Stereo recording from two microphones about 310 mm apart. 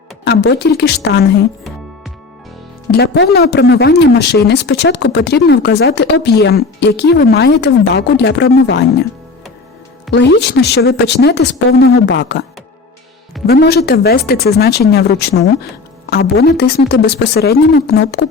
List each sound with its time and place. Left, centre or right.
0.3 s speech: left
2.9 s speech: left
10.1 s speech: left
13.5 s speech: left